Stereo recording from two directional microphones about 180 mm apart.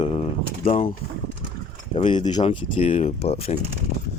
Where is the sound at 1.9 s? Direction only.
30° left (ahead or behind).